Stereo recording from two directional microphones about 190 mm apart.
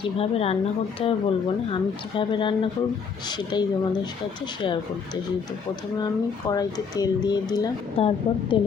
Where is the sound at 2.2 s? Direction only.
25° left (ahead or behind).